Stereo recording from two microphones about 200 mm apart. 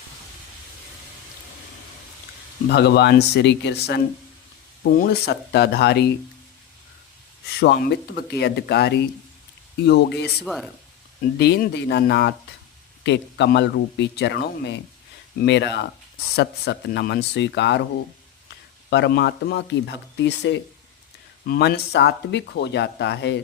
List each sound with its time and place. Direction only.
2.6 s speech: 55° left (ahead or behind)
7.6 s speech: 55° left (ahead or behind)
10.4 s speech: centre (ahead or behind)
11.3 s speech: 55° left (ahead or behind)
18.9 s speech: 60° left (ahead or behind)